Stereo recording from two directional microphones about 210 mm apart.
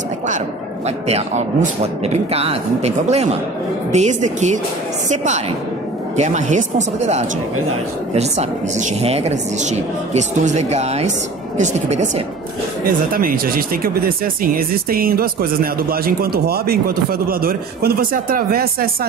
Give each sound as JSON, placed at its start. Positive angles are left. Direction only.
{"t": 0.8, "sound": "a woman's voice", "side_deg": -30}